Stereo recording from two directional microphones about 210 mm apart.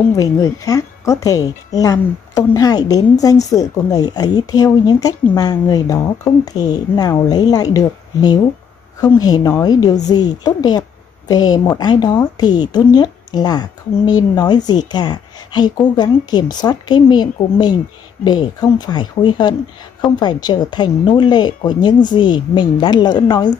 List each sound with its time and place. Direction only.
0.1 s a woman's voice: 15° left (ahead or behind)